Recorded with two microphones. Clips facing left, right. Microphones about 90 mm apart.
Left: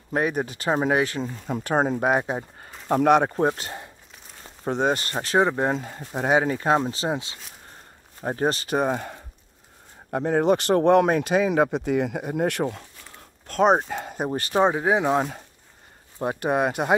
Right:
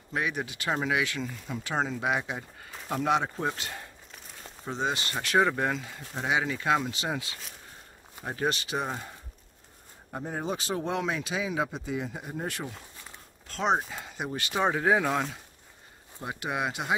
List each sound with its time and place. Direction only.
0.1 s speech: 40° left (ahead or behind)
2.9 s speech: 55° left (ahead or behind)
3.4 s speech: 35° left (ahead or behind)
4.6 s speech: 55° left (ahead or behind)
5.1 s speech: 30° left (ahead or behind)
5.8 s speech: 45° left (ahead or behind); by 7.3 s 25° left (ahead or behind)
8.2 s speech: 40° left (ahead or behind); by 9.2 s 60° left (ahead or behind)
10.1 s speech: 70° left (ahead or behind)
13.5 s speech: 50° left (ahead or behind); by 14.7 s 35° left (ahead or behind)
14.7 s speech: 20° left (ahead or behind)
16.2 s speech: 45° left (ahead or behind)